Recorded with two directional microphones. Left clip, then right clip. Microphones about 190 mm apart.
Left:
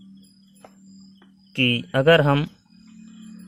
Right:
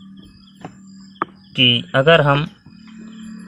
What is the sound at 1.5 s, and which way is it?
Speech, 45° left (ahead or behind).